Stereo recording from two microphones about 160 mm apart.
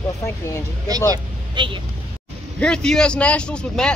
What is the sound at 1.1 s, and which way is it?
Vehicle, 30° right (ahead or behind).